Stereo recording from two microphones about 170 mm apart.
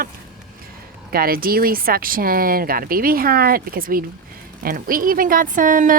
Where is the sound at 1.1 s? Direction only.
60° right (ahead or behind).